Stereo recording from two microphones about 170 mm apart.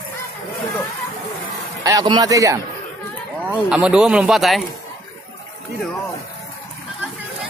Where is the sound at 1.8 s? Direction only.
20° right (ahead or behind).